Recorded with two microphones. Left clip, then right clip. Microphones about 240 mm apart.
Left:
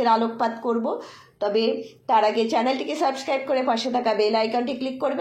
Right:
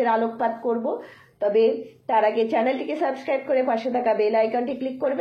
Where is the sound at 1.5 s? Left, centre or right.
Left.